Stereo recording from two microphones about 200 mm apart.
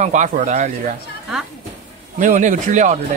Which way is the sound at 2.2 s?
40° right (ahead or behind).